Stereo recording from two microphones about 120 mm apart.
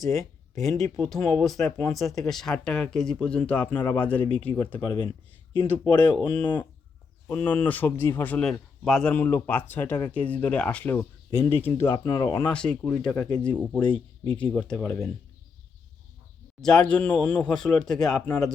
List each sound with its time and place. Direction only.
0.0 s speech: centre (ahead or behind)
4.8 s speech: 35° left (ahead or behind)
5.5 s speech: 15° left (ahead or behind)
9.1 s speech: 15° left (ahead or behind)
11.9 s speech: 40° left (ahead or behind)
12.2 s speech: 25° left (ahead or behind)
12.5 s speech: 5° left (ahead or behind)
16.6 s speech: 5° left (ahead or behind)